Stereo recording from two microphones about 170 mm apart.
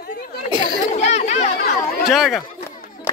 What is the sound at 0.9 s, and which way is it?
Children playing, 40° left (ahead or behind).